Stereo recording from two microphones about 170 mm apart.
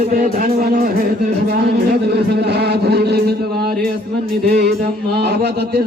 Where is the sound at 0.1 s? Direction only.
55° right (ahead or behind).